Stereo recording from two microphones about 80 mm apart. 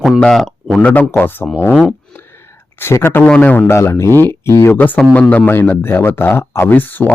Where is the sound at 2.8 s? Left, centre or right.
Left.